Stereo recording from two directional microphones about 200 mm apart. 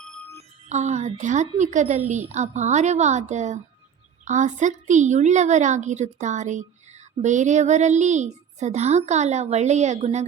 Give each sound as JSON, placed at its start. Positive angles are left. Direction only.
{"t": 0.7, "sound": "speech", "side_deg": -35}